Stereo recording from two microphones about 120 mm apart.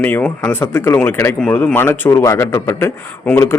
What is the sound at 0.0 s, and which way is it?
Speech, 15° left (ahead or behind).